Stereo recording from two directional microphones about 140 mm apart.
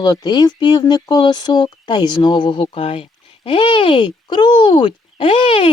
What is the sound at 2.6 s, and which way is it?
Speech, 45° left (ahead or behind).